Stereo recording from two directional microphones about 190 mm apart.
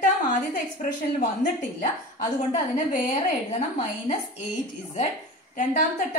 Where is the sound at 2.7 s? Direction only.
40° left (ahead or behind).